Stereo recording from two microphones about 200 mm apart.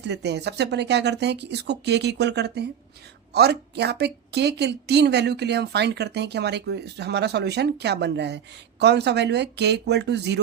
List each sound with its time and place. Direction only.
0.0 s speech: 55° right (ahead or behind)